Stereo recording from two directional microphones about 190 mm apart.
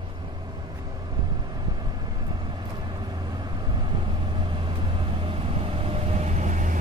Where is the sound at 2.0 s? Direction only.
25° right (ahead or behind).